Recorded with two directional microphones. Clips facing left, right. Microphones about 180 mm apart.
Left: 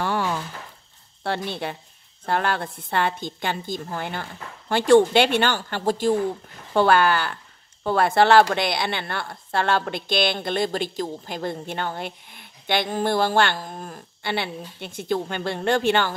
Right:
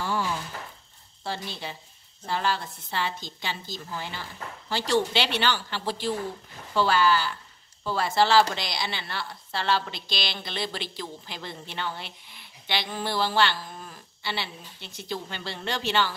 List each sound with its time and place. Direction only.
0.0 s a sound: 65° left (ahead or behind)
1.2 s a woman's voice: 60° left (ahead or behind)
6.7 s a woman's voice: 55° left (ahead or behind)